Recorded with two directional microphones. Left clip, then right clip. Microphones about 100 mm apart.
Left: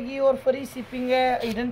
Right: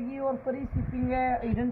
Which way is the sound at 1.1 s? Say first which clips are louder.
Left 6 dB; 45° left (ahead or behind).